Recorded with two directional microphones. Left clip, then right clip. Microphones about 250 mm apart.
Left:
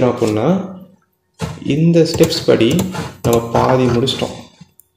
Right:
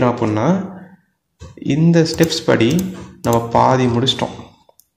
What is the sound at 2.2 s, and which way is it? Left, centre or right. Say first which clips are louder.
A man's voice: left 3 dB; right.